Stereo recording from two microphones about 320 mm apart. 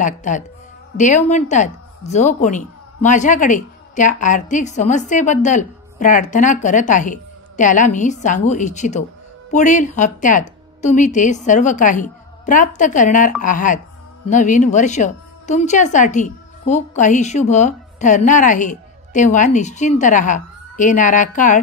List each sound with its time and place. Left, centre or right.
0.0 s speech: left